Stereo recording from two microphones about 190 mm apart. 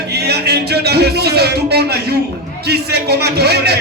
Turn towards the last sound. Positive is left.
turn(degrees=-60)  # may be behind; listen again after turning